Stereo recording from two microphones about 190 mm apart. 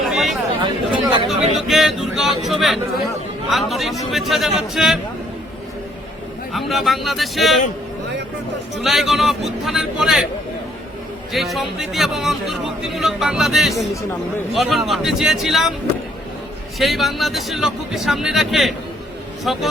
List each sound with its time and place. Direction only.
0.0 s a sound: centre (ahead or behind)
0.6 s chatter: 25° right (ahead or behind)
1.6 s a man's voice: centre (ahead or behind)
6.5 s a man's voice: centre (ahead or behind)
8.8 s a man's voice: centre (ahead or behind)
11.3 s a man's voice: centre (ahead or behind)
16.7 s a man's voice: centre (ahead or behind)